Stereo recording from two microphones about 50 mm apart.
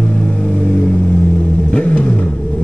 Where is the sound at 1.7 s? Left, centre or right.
Left.